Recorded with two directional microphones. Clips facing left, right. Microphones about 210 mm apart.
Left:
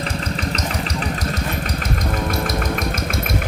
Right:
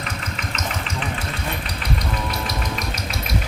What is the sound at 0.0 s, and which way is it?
Engine, 35° left (ahead or behind).